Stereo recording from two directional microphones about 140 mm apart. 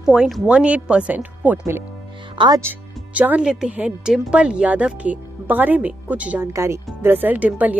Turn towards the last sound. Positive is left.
turn(degrees=-10)  # may be behind; listen again after turning